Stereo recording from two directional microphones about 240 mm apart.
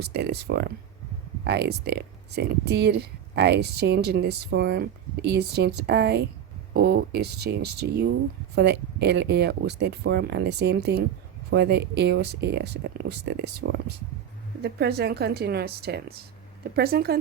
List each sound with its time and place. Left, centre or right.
0.0 s a woman's voice: right